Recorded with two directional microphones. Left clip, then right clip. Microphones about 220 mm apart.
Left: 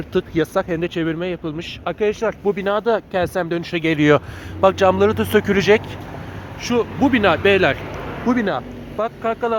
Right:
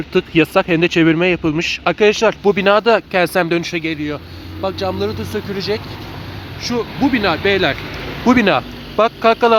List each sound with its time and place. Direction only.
0.3 s speech: 15° right (ahead or behind)
3.8 s speech: 20° left (ahead or behind)
6.6 s speech: 5° left (ahead or behind)
8.3 s speech: 15° right (ahead or behind)